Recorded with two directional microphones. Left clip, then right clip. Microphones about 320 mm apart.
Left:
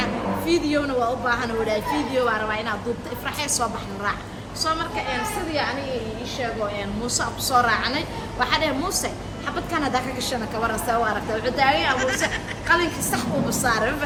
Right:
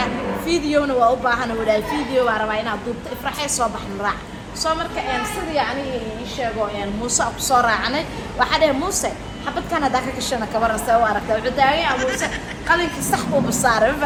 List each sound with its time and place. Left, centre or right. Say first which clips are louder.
0.0 s a woman's voice: right 2 dB; centre
7.2 s a woman's voice: right 3 dB; centre